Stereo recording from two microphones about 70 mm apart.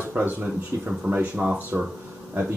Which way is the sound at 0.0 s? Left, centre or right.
Right.